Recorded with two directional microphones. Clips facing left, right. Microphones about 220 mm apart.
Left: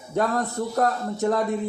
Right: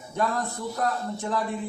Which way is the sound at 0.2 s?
45° left (ahead or behind).